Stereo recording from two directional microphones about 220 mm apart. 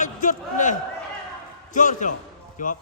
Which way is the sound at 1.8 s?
35° left (ahead or behind).